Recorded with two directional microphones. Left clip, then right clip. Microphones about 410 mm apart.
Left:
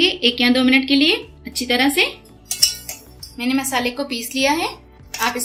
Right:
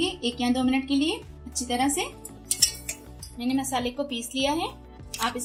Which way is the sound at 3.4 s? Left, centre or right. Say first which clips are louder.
Left 7 dB; centre.